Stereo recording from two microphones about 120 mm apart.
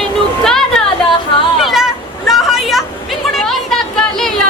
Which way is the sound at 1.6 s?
Centre (ahead or behind).